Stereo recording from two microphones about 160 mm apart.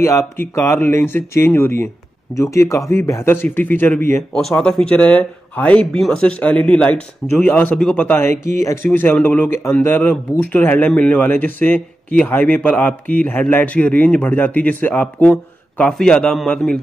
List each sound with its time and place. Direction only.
0.0 s speech: 20° left (ahead or behind)
4.3 s a man's voice: centre (ahead or behind)